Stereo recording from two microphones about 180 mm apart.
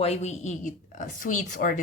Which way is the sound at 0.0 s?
35° left (ahead or behind).